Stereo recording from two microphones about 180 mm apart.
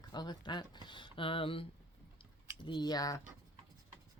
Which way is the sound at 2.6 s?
25° left (ahead or behind).